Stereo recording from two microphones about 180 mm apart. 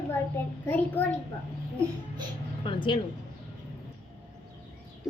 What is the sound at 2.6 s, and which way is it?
Speech, 25° left (ahead or behind).